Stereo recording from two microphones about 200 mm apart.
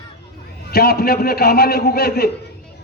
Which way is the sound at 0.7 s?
50° left (ahead or behind).